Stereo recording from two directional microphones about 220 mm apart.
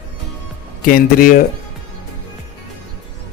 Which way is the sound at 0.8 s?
40° left (ahead or behind).